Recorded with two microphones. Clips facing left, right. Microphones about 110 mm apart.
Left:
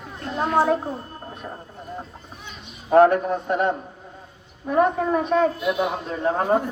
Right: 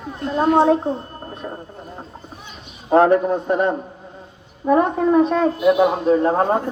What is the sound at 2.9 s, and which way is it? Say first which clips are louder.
A man's voice: right 1 dB; 35° right (ahead or behind).